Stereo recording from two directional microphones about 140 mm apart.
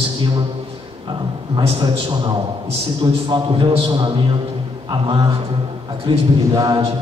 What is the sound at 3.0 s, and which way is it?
A man's voice, 35° right (ahead or behind).